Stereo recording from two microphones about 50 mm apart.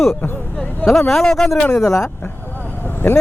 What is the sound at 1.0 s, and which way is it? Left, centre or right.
Speech, centre.